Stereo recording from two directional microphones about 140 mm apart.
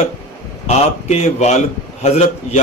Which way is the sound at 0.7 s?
50° left (ahead or behind).